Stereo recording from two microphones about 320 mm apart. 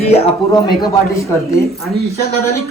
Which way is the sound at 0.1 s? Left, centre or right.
Centre.